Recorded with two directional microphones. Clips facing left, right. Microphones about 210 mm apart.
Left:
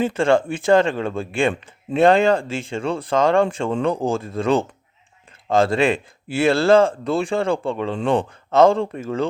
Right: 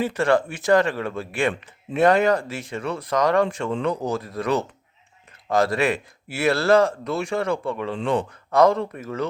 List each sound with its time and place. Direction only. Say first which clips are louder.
0.0 s speech: left 3 dB; 25° left (ahead or behind)